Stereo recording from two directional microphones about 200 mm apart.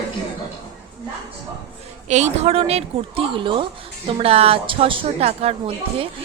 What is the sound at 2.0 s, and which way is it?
A woman's voice, 35° right (ahead or behind).